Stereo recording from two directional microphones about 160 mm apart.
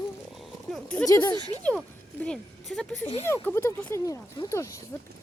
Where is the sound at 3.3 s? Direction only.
15° left (ahead or behind).